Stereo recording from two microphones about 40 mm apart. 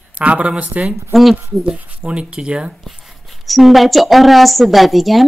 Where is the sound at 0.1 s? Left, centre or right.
Right.